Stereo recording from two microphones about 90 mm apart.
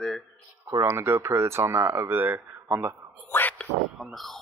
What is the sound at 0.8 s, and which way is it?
Speech, 25° right (ahead or behind).